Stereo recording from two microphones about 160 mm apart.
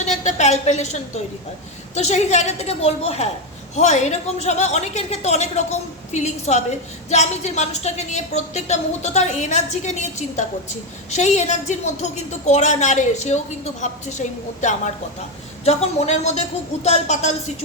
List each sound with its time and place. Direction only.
0.0 s a woman's voice: 45° left (ahead or behind)